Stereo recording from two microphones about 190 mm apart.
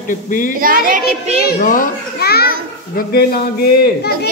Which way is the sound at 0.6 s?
45° right (ahead or behind).